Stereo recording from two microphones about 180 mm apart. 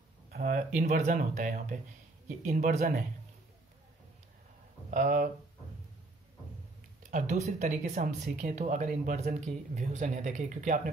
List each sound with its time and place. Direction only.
0.3 s speech: 45° right (ahead or behind)
4.9 s speech: 45° right (ahead or behind)
7.0 s speech: 45° right (ahead or behind)